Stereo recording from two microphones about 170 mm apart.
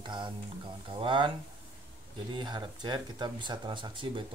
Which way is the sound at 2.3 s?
25° right (ahead or behind).